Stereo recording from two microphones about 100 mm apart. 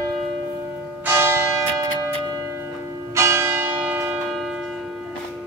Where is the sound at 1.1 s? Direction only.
25° right (ahead or behind).